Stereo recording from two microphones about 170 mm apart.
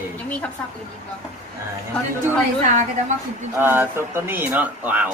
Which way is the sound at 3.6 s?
15° right (ahead or behind).